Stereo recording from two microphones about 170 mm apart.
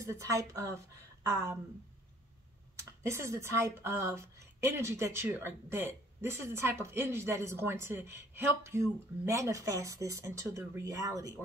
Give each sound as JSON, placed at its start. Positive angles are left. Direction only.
{"t": 0.0, "sound": "speech", "side_deg": -20}
{"t": 2.7, "sound": "speech", "side_deg": -15}